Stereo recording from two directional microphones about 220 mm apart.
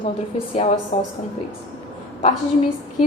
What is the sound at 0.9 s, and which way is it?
Speech, 25° left (ahead or behind).